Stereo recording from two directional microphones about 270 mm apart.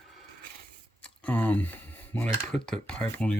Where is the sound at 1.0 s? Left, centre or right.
Centre.